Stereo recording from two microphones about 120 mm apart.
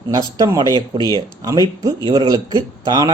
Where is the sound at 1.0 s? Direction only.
30° left (ahead or behind).